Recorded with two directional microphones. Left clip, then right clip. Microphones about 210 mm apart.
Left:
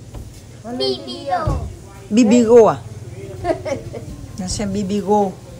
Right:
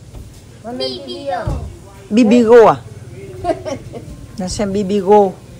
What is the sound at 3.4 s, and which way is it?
Speech, 30° right (ahead or behind).